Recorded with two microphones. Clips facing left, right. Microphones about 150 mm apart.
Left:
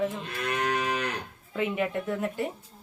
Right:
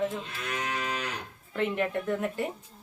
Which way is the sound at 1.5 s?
5° left (ahead or behind).